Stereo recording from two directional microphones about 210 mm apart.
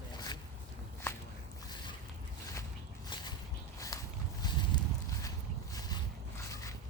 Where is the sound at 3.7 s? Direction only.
15° left (ahead or behind).